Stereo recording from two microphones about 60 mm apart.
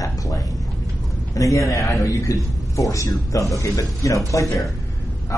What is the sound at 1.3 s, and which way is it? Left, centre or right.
A man's voice, left.